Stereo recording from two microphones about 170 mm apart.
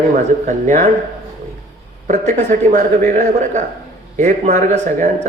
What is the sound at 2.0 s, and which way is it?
Speech, 45° right (ahead or behind).